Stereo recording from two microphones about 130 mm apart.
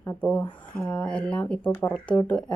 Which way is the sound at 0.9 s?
10° left (ahead or behind).